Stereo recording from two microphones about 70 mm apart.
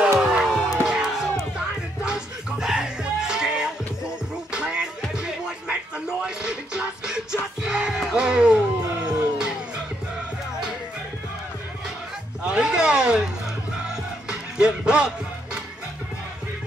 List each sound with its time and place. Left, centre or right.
0.2 s music: centre
12.4 s a sound: centre
13.8 s music: centre